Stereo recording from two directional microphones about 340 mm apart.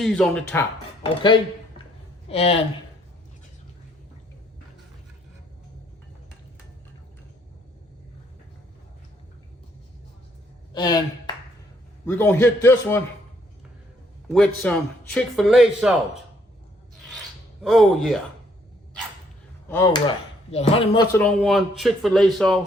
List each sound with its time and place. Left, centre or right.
0.0 s speech: centre
2.2 s speech: centre
10.8 s a man's voice: centre
14.3 s speech: centre
17.6 s speech: centre
19.6 s speech: centre